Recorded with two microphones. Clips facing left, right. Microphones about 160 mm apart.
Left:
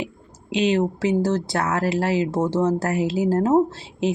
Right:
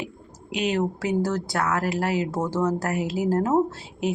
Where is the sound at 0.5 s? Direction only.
30° left (ahead or behind).